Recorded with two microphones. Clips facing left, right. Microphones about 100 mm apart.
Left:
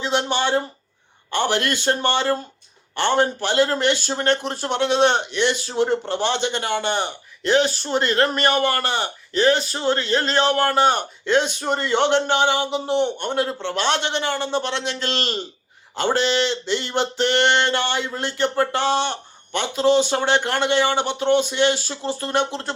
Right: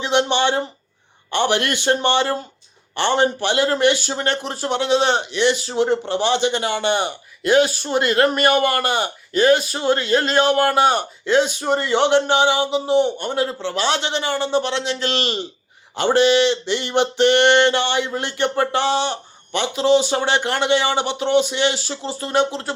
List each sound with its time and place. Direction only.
0.0 s speech: 20° right (ahead or behind)
1.7 s a man's voice: 15° right (ahead or behind)